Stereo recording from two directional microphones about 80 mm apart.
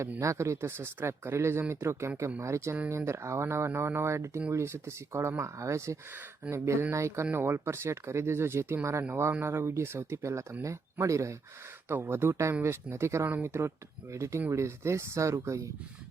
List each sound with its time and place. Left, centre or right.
0.2 s speech: right
11.9 s speech: right